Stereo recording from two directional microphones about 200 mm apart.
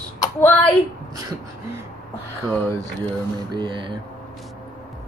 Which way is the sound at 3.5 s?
20° right (ahead or behind).